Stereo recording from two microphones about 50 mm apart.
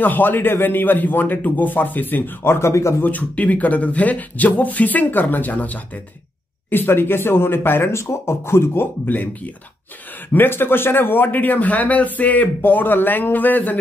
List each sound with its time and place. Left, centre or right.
0.0 s speech: left
2.4 s a man's voice: left
3.0 s speech: left
6.7 s speech: left
10.3 s speech: left